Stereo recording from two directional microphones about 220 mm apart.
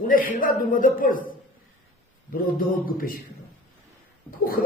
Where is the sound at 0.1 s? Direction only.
40° left (ahead or behind).